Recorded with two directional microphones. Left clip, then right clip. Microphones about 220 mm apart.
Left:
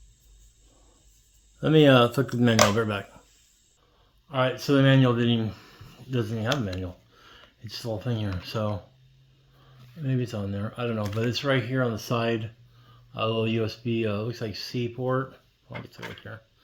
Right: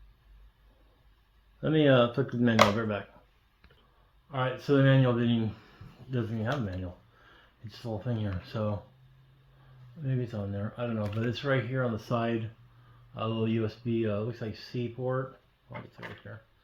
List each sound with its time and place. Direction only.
1.6 s speech: 45° left (ahead or behind)
4.3 s speech: 45° left (ahead or behind)
7.7 s speech: 45° left (ahead or behind)
10.0 s speech: 45° left (ahead or behind)
16.3 s speech: 50° left (ahead or behind)